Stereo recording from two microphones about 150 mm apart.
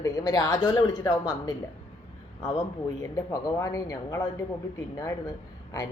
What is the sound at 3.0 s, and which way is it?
A woman's voice, 20° left (ahead or behind).